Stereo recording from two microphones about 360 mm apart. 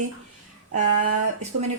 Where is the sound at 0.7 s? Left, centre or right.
Right.